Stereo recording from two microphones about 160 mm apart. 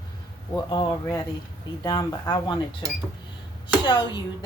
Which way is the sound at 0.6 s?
25° left (ahead or behind).